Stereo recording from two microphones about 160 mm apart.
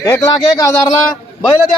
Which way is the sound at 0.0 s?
20° left (ahead or behind).